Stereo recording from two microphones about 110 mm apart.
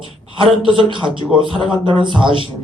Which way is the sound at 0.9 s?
50° right (ahead or behind).